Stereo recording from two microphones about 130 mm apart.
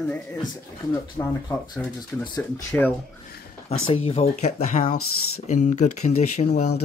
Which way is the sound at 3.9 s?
50° left (ahead or behind).